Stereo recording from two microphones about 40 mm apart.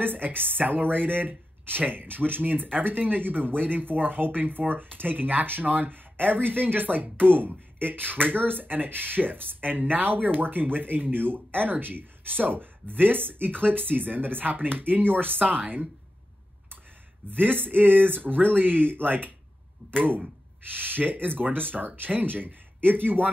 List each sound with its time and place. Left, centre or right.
0.0 s speech: right
17.3 s speech: right
19.8 s a sound: right
20.6 s speech: right